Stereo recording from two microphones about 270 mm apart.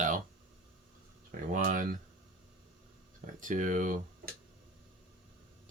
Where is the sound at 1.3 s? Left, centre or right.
Right.